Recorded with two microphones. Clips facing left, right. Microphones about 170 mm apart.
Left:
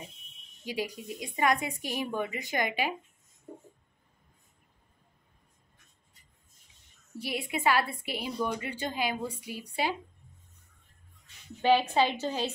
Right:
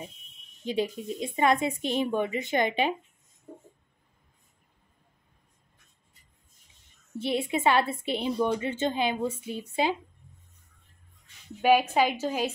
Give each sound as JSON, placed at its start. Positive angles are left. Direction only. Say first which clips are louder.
{"t": 0.7, "sound": "a woman's voice", "louder": "right 6 dB", "side_deg": -25}
{"t": 7.2, "sound": "a woman's voice", "louder": "right 6 dB", "side_deg": -25}
{"t": 11.6, "sound": "a woman's voice", "louder": "right 2 dB", "side_deg": -10}